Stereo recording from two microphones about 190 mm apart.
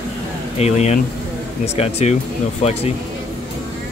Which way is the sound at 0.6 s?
35° left (ahead or behind).